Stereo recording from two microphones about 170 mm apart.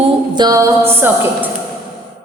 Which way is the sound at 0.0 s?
25° right (ahead or behind).